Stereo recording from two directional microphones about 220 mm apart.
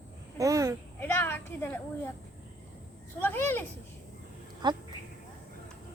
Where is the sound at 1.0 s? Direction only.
10° left (ahead or behind).